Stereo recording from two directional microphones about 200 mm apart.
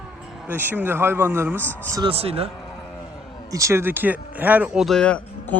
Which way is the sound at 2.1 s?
30° right (ahead or behind).